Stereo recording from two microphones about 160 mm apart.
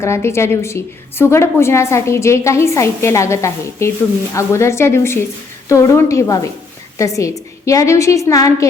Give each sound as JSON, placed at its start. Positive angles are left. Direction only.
{"t": 0.0, "sound": "a woman's voice", "side_deg": 15}